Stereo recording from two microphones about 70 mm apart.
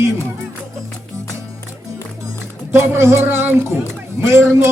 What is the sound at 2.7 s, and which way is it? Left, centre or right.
Music, right.